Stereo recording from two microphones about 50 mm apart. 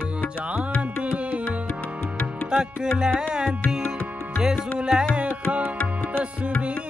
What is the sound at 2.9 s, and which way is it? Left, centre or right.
Music, centre.